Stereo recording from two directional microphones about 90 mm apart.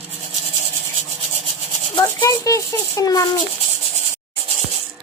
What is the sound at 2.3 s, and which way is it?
Child singing, 40° left (ahead or behind).